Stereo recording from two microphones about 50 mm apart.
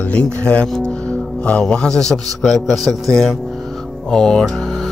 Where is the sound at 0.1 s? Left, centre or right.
Left.